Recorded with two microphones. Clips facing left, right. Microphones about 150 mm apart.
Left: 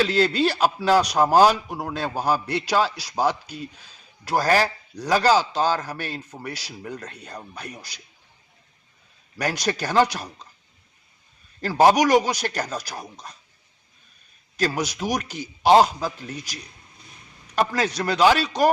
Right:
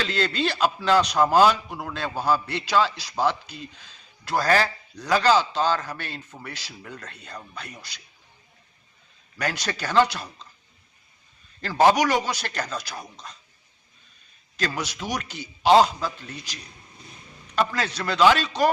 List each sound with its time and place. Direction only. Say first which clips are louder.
0.0 s a man's voice: left 5 dB; 10° left (ahead or behind)
1.4 s a man's voice: left 2 dB; 40° left (ahead or behind)
2.1 s a man's voice: even; 10° left (ahead or behind)
9.4 s a man's voice: left 4 dB; 10° left (ahead or behind)
11.7 s a man's voice: left 3 dB; 10° left (ahead or behind)
15.0 s a man's voice: left 4 dB; 10° left (ahead or behind)
17.6 s a man's voice: left 2 dB; 10° left (ahead or behind)